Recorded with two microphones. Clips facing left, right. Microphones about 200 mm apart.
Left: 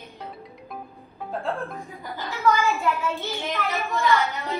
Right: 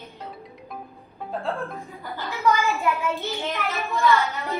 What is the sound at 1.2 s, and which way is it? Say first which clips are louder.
Speech: even; centre (ahead or behind).